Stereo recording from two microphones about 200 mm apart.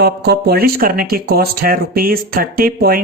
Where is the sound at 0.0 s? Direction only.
55° right (ahead or behind).